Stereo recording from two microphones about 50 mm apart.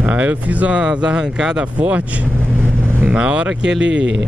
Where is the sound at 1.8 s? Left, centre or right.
Right.